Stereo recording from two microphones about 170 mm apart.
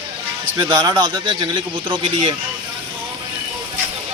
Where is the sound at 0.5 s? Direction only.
20° right (ahead or behind).